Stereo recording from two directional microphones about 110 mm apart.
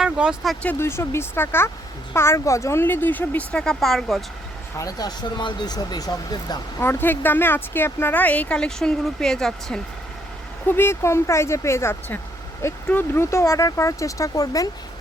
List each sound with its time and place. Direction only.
0.0 s speech: 5° right (ahead or behind)
0.6 s speech: 20° left (ahead or behind); by 4.2 s centre (ahead or behind)
4.8 s speech: 35° left (ahead or behind)
6.7 s speech: 20° left (ahead or behind); by 9.8 s 5° left (ahead or behind)
10.7 s speech: 20° left (ahead or behind)
13.4 s speech: 30° left (ahead or behind)